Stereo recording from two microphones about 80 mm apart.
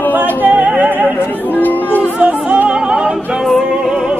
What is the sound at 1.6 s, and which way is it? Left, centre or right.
Music, left.